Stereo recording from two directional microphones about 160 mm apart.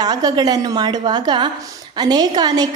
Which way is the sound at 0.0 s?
25° right (ahead or behind).